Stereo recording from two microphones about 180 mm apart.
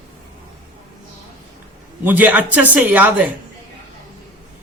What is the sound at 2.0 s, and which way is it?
A man's voice, 10° right (ahead or behind).